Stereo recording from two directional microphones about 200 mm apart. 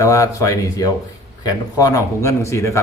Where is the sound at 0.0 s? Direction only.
15° left (ahead or behind).